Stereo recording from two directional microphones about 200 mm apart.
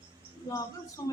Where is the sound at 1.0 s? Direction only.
15° left (ahead or behind).